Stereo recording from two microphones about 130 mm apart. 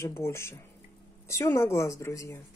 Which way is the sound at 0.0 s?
20° left (ahead or behind).